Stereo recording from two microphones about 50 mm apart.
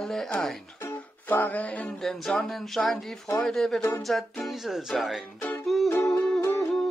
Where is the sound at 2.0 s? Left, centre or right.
Centre.